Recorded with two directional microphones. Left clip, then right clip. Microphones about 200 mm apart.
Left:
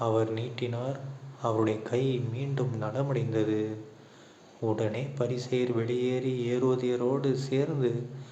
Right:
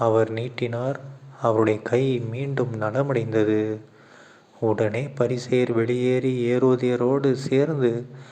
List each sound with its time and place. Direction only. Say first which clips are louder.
0.0 s speech: right 7 dB; 35° right (ahead or behind)